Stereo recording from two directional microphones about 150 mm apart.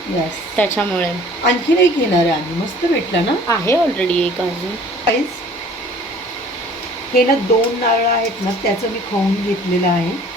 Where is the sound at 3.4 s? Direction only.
15° left (ahead or behind).